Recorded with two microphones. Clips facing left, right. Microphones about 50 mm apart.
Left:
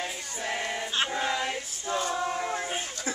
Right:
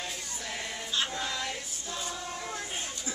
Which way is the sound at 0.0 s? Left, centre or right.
Left.